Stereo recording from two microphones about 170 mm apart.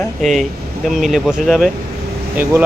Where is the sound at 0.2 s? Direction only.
Centre (ahead or behind).